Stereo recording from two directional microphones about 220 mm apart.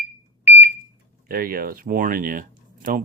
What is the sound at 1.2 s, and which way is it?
Speech, 40° right (ahead or behind).